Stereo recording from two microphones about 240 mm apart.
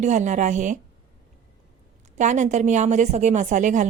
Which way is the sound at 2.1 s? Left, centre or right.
Right.